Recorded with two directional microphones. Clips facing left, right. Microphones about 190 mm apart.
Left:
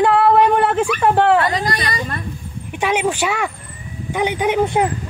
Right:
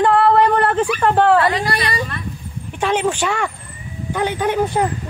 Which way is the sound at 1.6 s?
30° right (ahead or behind).